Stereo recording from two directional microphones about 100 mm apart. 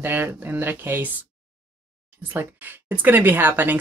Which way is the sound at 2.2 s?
20° right (ahead or behind).